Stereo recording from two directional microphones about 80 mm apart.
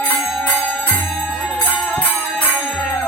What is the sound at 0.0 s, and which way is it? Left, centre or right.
Music, left.